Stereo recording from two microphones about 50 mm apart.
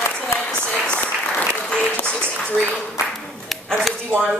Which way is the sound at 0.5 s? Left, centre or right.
Left.